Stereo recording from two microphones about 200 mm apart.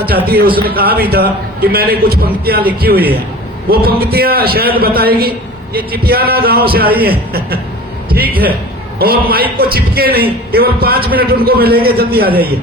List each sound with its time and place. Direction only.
0.3 s a man's voice: 50° right (ahead or behind)